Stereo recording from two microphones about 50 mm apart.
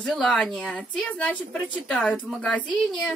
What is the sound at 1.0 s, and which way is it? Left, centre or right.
Speech, left.